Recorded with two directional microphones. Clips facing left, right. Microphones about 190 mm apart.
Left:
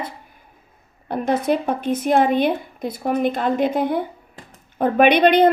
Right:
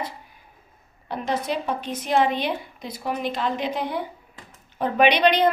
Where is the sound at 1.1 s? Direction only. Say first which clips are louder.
Left 6 dB; 55° left (ahead or behind).